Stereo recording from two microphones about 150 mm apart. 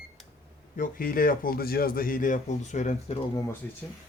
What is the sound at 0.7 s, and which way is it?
A man's voice, 65° left (ahead or behind).